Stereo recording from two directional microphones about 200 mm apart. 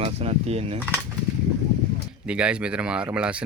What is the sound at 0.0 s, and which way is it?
Speech, 30° right (ahead or behind).